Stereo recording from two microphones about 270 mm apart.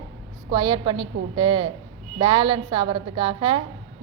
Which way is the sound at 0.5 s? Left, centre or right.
Centre.